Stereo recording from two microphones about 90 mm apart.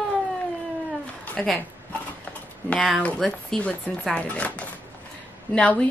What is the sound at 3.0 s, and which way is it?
Speech, 5° left (ahead or behind).